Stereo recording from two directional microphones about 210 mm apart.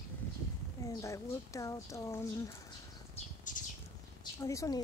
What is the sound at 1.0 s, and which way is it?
Speech, 15° left (ahead or behind).